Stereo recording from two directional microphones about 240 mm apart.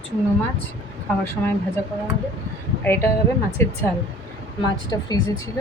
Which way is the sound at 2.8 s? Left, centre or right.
Centre.